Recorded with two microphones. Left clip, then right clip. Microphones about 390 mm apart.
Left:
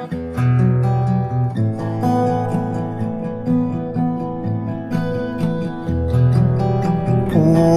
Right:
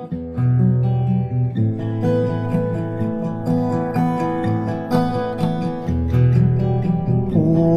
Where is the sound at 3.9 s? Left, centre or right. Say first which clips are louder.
Right 3 dB; right.